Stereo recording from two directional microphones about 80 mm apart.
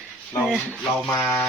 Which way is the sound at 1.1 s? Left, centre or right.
Left.